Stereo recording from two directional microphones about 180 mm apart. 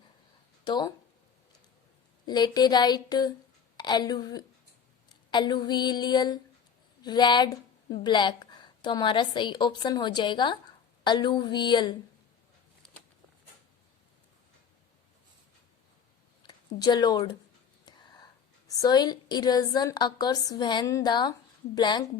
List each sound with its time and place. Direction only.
0.6 s speech: 25° left (ahead or behind)
2.2 s a woman's voice: 25° left (ahead or behind)
16.4 s speech: 25° left (ahead or behind)
17.8 s whispering: 25° left (ahead or behind)
18.7 s a woman's voice: 20° left (ahead or behind)